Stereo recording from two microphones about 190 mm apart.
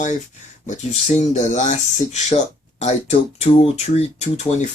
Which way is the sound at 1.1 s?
35° left (ahead or behind).